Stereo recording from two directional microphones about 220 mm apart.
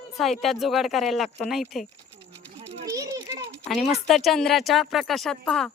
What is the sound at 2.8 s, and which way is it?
Children playing, 15° right (ahead or behind).